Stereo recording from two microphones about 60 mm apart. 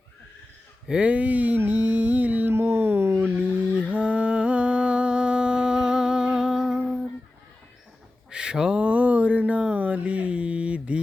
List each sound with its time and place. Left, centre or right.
0.9 s speech: centre
1.5 s music: right
2.5 s a sound: right
3.8 s music: right; by 7.1 s centre
8.3 s a sound: centre
8.8 s mantra: right